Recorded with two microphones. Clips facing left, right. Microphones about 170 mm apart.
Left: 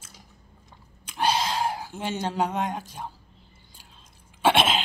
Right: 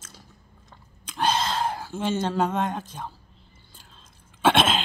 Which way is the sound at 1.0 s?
10° left (ahead or behind).